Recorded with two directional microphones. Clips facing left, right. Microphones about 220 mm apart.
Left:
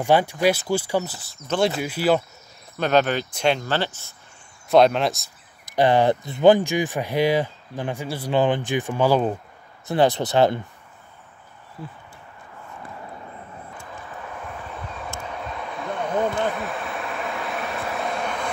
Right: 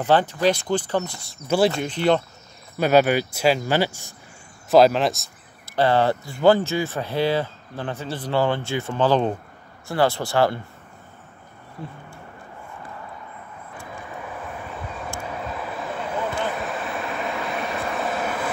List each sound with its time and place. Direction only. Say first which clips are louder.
0.0 s speech: even; 10° left (ahead or behind)
2.8 s speech: right 3 dB; 10° right (ahead or behind)
4.6 s speech: right 1 dB; centre (ahead or behind)
5.7 s speech: left 1 dB; 15° left (ahead or behind)
11.8 s speech: right 1 dB; centre (ahead or behind)
15.5 s vehicle: even; 5° right (ahead or behind)